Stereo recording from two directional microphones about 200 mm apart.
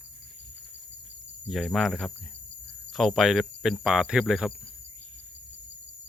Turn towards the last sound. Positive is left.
turn(degrees=-5)  # may be behind; listen again after turning